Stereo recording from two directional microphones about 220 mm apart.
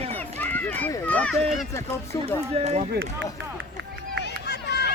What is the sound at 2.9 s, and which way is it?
Speech, 60° right (ahead or behind).